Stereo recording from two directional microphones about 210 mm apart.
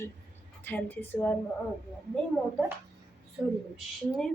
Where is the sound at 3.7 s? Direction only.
Centre (ahead or behind).